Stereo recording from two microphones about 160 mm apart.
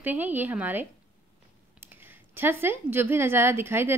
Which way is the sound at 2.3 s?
15° right (ahead or behind).